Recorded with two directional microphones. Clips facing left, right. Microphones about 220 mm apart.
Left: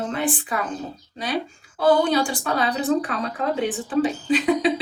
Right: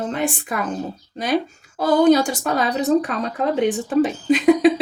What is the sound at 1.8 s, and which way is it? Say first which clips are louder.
Speech: right 4 dB; 40° right (ahead or behind).